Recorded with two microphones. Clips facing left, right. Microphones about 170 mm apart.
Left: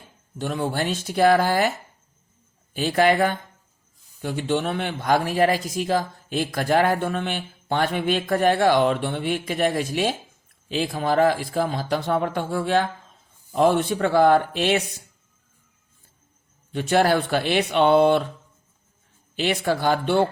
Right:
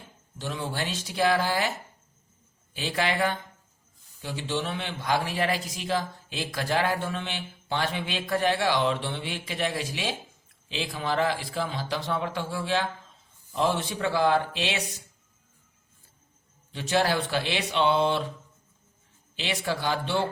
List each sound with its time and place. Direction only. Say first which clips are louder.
0.3 s a man's voice: left 7 dB; 50° left (ahead or behind)
2.7 s a man's voice: left 9 dB; 50° left (ahead or behind)
16.7 s a man's voice: left 6 dB; 50° left (ahead or behind)
19.4 s a man's voice: left 7 dB; 50° left (ahead or behind)